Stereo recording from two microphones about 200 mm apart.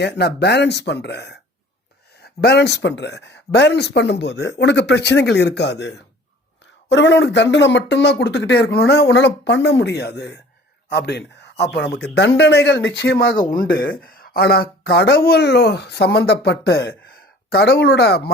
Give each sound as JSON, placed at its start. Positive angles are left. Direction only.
{"t": 0.0, "sound": "speech", "side_deg": 55}
{"t": 6.9, "sound": "speech", "side_deg": 60}